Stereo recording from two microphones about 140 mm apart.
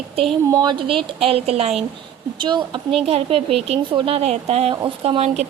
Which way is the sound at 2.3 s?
35° right (ahead or behind).